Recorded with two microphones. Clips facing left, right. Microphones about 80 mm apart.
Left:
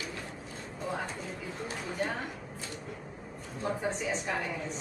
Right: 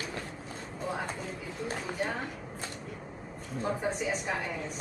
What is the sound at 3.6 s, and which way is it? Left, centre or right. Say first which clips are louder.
Speech: right 1 dB; centre.